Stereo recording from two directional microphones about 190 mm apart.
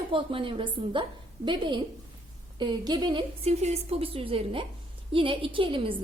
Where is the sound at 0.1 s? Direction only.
25° right (ahead or behind).